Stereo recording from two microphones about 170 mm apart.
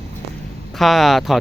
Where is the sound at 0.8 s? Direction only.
Centre (ahead or behind).